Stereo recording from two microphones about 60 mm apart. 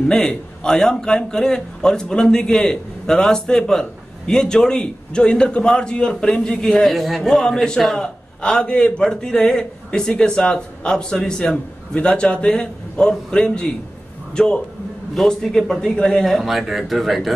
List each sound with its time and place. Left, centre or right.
0.1 s a man's voice: centre
16.3 s speech: centre